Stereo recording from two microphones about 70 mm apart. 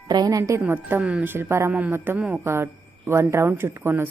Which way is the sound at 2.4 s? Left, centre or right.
Right.